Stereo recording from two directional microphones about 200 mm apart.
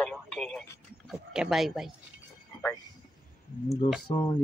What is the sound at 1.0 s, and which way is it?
Speech, 5° right (ahead or behind).